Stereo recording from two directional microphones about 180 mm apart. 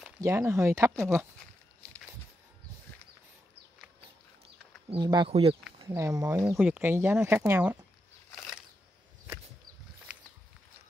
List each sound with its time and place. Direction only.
0.2 s speech: 15° right (ahead or behind)
4.8 s speech: 25° right (ahead or behind)
5.8 s speech: 20° right (ahead or behind)